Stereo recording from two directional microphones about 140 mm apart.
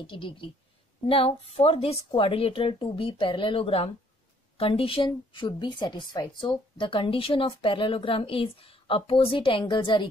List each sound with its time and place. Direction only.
0.0 s a woman's voice: 35° left (ahead or behind)